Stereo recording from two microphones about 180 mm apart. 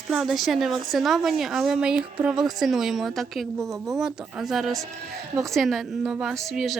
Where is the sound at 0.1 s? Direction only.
Centre (ahead or behind).